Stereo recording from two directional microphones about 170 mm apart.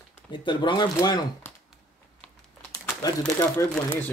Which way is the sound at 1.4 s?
15° left (ahead or behind).